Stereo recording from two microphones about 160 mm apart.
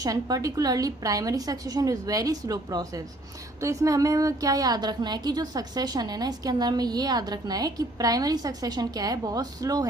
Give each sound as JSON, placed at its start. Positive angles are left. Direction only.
{"t": 0.0, "sound": "a woman's voice", "side_deg": -20}